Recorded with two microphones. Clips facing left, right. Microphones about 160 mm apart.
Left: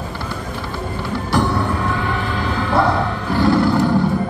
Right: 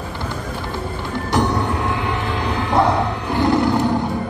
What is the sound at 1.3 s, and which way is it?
Music, 20° right (ahead or behind).